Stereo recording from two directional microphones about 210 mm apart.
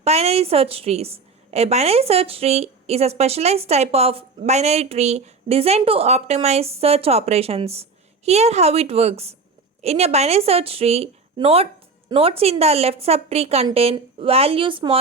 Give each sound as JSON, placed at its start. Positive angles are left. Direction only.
{"t": 0.0, "sound": "a woman's voice", "side_deg": -30}